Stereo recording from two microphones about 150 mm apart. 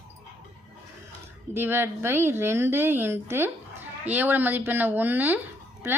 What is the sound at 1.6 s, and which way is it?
Speech, 15° right (ahead or behind).